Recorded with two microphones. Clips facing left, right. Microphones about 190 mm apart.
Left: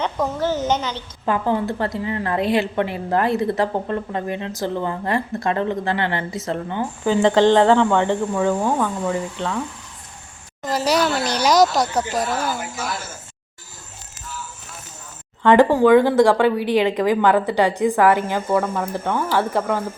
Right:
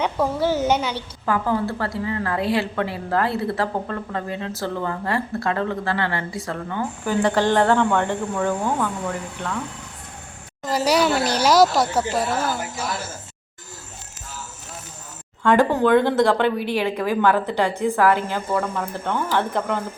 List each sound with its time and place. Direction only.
0.0 s speech: 10° right (ahead or behind)
1.2 s a woman's voice: 20° left (ahead or behind)
10.7 s speech: 10° right (ahead or behind)
15.5 s a woman's voice: 10° left (ahead or behind)